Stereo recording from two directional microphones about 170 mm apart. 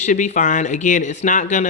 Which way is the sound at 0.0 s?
45° left (ahead or behind).